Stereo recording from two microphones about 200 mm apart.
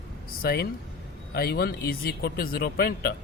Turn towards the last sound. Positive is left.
turn(degrees=50)  # may be behind; listen again after turning